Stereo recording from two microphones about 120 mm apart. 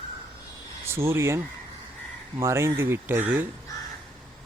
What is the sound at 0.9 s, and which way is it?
Speech, 20° right (ahead or behind).